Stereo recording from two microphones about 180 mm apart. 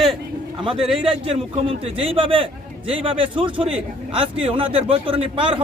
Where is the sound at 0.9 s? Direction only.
30° right (ahead or behind).